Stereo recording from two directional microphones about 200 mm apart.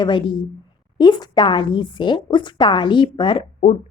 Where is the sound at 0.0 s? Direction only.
25° left (ahead or behind).